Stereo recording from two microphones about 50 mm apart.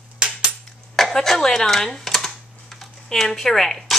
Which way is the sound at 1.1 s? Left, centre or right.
Centre.